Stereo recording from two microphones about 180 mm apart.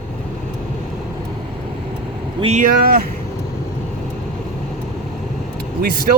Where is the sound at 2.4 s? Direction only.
35° right (ahead or behind).